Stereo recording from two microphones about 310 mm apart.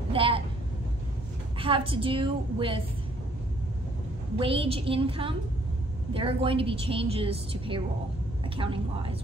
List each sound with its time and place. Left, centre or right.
0.1 s a sound: centre
1.6 s a woman's voice: centre
4.4 s a woman's voice: centre